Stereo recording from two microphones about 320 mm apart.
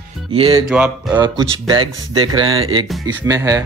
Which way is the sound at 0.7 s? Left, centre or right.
Centre.